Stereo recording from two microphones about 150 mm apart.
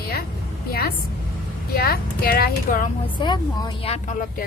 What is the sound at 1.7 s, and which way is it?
A woman's voice, 85° left.